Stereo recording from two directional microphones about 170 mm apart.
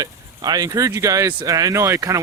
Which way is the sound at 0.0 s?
20° right (ahead or behind).